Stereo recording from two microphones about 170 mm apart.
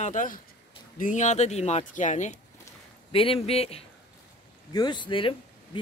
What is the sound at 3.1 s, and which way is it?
Speech, 30° left (ahead or behind).